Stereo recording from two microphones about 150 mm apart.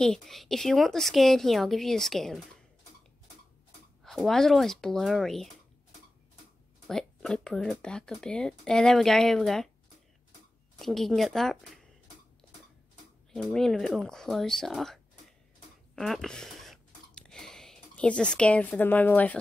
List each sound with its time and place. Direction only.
0.0 s speech: 5° left (ahead or behind)
4.0 s speech: centre (ahead or behind)
6.9 s speech: 5° left (ahead or behind)
10.8 s speech: centre (ahead or behind)
13.3 s speech: 5° left (ahead or behind)
16.0 s a sound: centre (ahead or behind)